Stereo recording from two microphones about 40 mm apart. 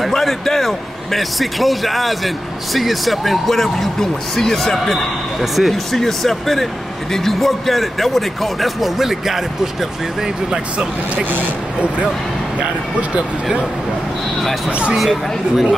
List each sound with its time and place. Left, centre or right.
0.0 s a man's voice: centre
5.4 s a man's voice: centre
5.9 s a man's voice: centre
10.5 s speech: right
12.5 s speech: right
14.7 s speech: right
15.0 s a man's voice: centre